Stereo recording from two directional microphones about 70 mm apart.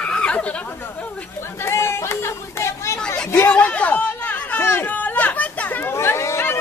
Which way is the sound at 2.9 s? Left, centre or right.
Centre.